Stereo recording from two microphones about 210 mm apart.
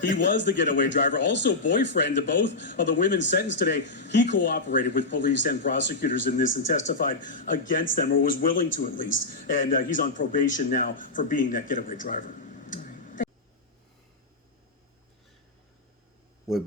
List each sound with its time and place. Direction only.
0.2 s speech: 55° left (ahead or behind)
5.9 s a man's voice: 40° left (ahead or behind)